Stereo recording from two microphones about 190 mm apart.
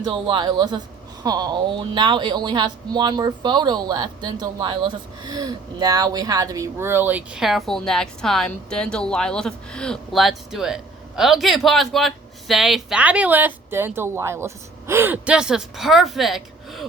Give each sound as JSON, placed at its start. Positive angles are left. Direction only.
{"t": 0.0, "sound": "a woman's voice", "side_deg": -25}